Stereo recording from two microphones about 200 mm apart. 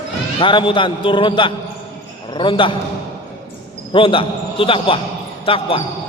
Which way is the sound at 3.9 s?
25° left (ahead or behind).